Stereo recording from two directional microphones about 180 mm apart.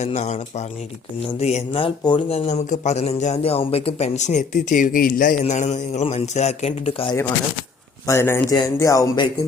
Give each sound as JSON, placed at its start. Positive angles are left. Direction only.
{"t": 0.0, "sound": "a man's voice", "side_deg": 40}
{"t": 1.4, "sound": "a man's voice", "side_deg": 35}
{"t": 2.5, "sound": "a man's voice", "side_deg": 40}
{"t": 7.1, "sound": "a man's voice", "side_deg": 25}